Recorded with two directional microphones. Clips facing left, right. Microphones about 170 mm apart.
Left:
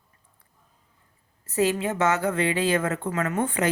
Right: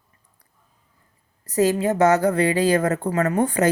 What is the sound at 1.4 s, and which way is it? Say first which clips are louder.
A woman's voice: right 4 dB; 40° right (ahead or behind).